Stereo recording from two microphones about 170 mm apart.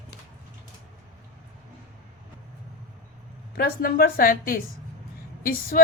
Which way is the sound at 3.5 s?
60° left (ahead or behind).